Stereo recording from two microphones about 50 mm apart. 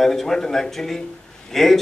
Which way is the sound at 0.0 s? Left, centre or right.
Centre.